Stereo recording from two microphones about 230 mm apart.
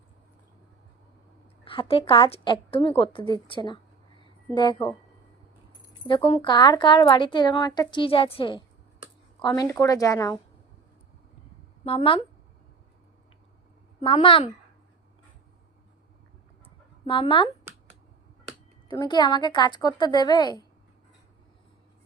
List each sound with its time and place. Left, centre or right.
1.6 s a woman's voice: left
6.1 s a woman's voice: left
11.9 s a woman's voice: left
14.0 s a woman's voice: left
17.1 s a woman's voice: left
18.9 s a woman's voice: centre